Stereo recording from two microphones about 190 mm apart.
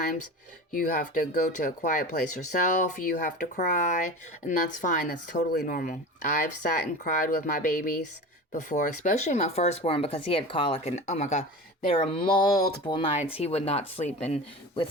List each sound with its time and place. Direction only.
0.7 s speech: 45° left (ahead or behind); by 13.1 s 20° left (ahead or behind)
13.4 s speech: 35° left (ahead or behind)